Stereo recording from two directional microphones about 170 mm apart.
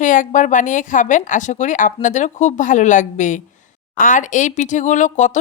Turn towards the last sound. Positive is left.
turn(degrees=45)  # may be behind; listen again after turning